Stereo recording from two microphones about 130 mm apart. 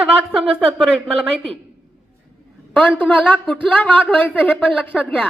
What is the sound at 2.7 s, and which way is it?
Speech, 10° left (ahead or behind).